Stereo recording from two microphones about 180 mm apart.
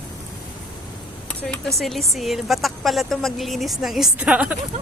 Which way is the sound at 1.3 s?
5° left (ahead or behind).